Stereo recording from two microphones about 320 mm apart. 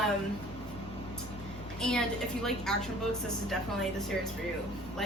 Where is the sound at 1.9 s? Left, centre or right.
Centre.